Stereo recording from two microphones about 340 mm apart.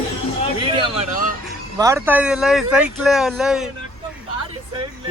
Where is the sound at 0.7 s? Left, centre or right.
Centre.